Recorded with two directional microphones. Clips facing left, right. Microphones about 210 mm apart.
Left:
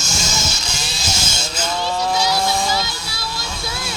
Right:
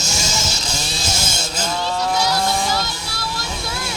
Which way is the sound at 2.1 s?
5° left (ahead or behind).